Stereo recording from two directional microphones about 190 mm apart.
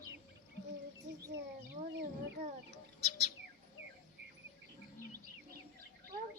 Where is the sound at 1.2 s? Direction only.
15° right (ahead or behind).